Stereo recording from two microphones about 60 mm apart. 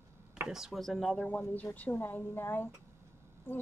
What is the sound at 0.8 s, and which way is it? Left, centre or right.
Speech, centre.